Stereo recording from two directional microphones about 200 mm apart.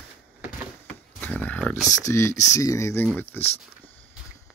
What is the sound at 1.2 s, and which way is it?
Dog, 10° left (ahead or behind).